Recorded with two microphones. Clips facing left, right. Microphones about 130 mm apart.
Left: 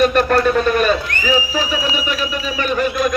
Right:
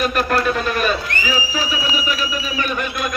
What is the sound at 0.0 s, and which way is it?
Speech, centre (ahead or behind).